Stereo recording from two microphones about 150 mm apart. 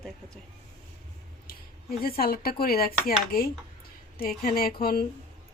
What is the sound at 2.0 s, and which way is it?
A woman's voice, 90° left.